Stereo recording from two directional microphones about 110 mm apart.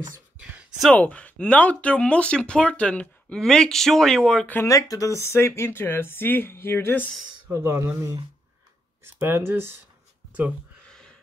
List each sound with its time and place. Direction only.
0.4 s a sound: 10° right (ahead or behind)
0.9 s speech: 10° left (ahead or behind)
4.6 s speech: 30° left (ahead or behind)
7.5 s speech: 25° right (ahead or behind)
10.9 s music: 5° left (ahead or behind)